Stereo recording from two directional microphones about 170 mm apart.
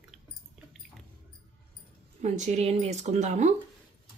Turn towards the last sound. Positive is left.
turn(degrees=-45)  # may be behind; listen again after turning